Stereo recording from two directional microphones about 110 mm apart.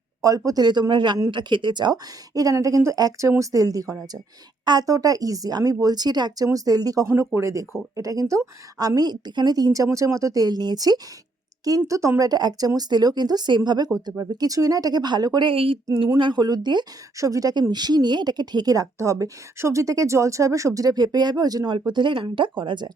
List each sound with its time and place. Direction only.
0.2 s speech: 30° right (ahead or behind)
11.9 s speech: 25° right (ahead or behind)
15.4 s speech: 55° right (ahead or behind)
16.1 s speech: 45° right (ahead or behind)